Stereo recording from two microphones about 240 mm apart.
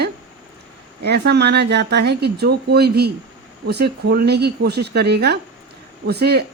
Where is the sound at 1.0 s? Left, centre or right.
Right.